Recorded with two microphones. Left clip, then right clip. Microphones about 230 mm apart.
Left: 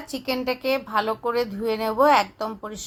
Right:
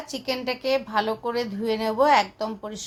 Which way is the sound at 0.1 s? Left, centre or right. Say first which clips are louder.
Left 2 dB; centre.